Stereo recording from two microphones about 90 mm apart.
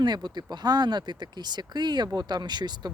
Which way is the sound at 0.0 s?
50° right (ahead or behind).